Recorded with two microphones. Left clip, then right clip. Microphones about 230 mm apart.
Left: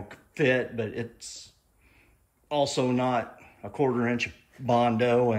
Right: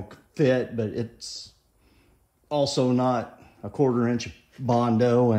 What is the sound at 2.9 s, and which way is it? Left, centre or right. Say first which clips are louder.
Speech: right 2 dB; centre.